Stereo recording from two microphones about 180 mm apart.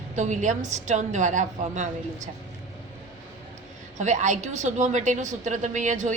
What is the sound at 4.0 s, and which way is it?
A woman's voice, 40° right (ahead or behind).